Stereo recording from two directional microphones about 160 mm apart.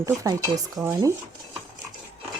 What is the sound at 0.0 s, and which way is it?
Speech, 20° right (ahead or behind).